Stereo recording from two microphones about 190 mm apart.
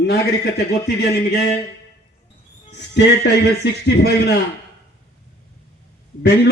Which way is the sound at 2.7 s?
65° left (ahead or behind).